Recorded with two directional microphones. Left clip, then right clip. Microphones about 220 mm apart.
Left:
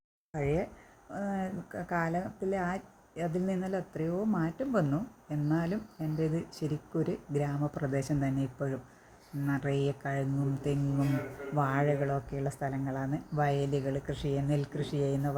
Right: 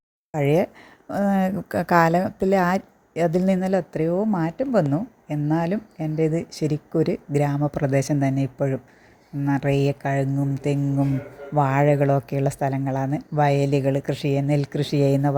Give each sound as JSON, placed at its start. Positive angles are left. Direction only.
{"t": 0.3, "sound": "speech", "side_deg": -40}